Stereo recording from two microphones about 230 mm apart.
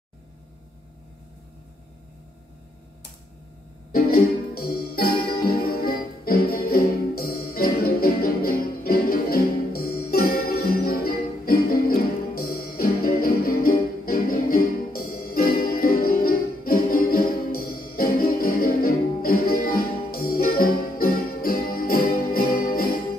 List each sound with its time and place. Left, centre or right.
3.9 s music: left